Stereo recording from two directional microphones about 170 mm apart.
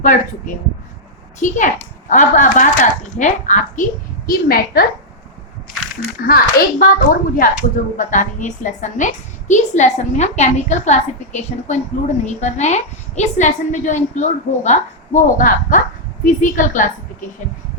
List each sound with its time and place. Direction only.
0.0 s a woman's voice: 50° left (ahead or behind)
4.3 s a child's voice: 60° left (ahead or behind)
6.2 s a child's voice: 60° left (ahead or behind)